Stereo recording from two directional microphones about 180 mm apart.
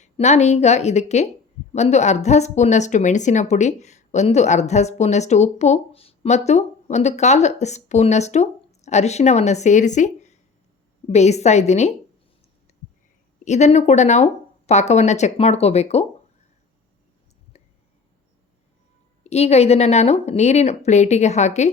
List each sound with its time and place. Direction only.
0.0 s speech: 40° left (ahead or behind)
13.4 s speech: 40° left (ahead or behind)
17.5 s whispering: 35° left (ahead or behind)
19.2 s speech: 35° left (ahead or behind)